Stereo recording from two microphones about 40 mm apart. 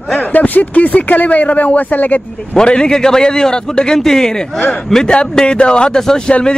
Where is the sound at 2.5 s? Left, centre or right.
Left.